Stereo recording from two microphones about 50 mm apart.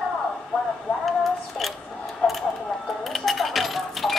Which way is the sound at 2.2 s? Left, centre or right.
Centre.